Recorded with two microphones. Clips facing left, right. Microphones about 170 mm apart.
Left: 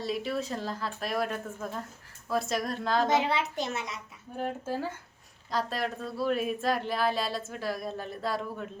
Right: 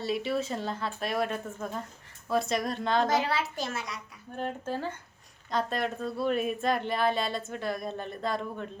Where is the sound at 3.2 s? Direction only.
20° left (ahead or behind).